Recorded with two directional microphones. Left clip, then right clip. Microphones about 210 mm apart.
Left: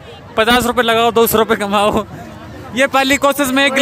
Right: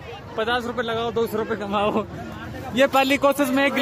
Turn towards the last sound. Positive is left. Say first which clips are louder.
# left 6 dB
turn(degrees=5)  # may be behind; listen again after turning